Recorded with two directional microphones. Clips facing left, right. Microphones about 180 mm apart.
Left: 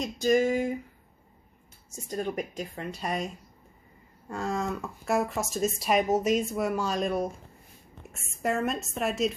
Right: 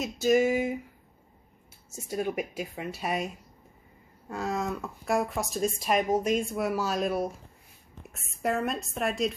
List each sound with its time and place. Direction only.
0.0 s speech: 5° right (ahead or behind)
1.9 s speech: 10° right (ahead or behind)